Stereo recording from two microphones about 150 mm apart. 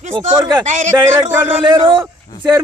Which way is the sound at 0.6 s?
55° right (ahead or behind).